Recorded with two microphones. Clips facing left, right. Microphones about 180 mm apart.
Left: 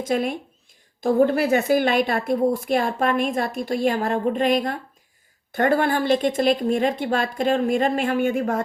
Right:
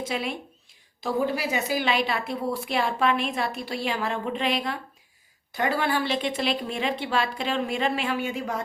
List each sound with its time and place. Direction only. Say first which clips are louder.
0.0 s a woman's voice: left 7 dB; 50° left (ahead or behind)